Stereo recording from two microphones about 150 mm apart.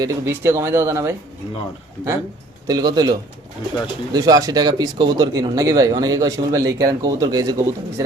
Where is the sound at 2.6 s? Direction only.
25° right (ahead or behind).